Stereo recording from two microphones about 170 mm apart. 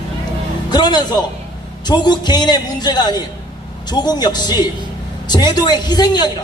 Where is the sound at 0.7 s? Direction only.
25° left (ahead or behind).